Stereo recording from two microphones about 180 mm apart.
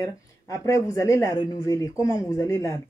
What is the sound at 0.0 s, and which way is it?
Speech, 15° left (ahead or behind).